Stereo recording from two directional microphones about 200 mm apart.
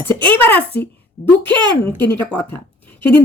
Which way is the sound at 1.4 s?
20° right (ahead or behind).